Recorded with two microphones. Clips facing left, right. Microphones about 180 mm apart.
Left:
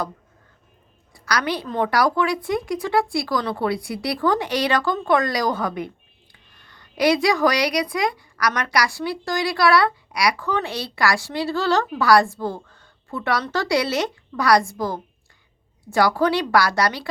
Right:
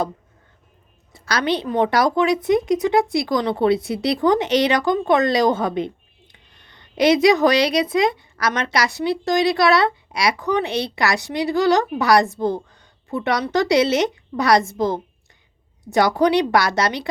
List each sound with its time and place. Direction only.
1.1 s a woman's voice: 25° right (ahead or behind)